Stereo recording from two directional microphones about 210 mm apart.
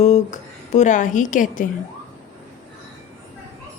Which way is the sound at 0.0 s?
35° left (ahead or behind).